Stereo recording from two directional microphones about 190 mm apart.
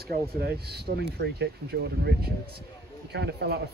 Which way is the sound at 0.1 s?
60° right (ahead or behind).